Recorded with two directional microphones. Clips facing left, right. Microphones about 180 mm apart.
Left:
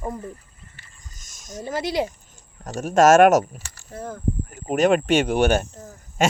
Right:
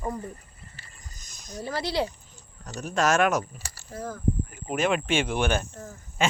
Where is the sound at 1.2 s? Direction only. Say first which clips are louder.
Left 3 dB; 45° left (ahead or behind).